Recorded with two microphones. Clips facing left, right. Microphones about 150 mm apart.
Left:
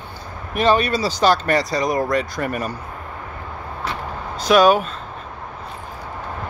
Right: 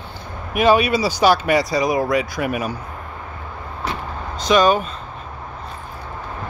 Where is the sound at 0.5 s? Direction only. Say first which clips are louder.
Right 2 dB; 10° right (ahead or behind).